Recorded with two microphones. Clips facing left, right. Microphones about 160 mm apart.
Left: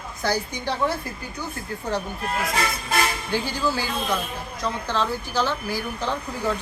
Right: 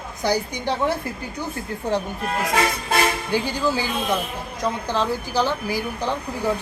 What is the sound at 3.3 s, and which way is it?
A woman's voice, 15° right (ahead or behind).